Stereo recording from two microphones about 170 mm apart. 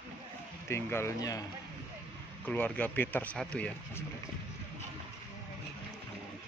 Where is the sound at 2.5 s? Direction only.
10° left (ahead or behind).